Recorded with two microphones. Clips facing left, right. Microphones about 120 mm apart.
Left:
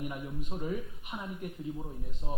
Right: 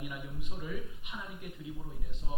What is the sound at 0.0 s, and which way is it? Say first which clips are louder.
Speech: left 5 dB; 40° left (ahead or behind).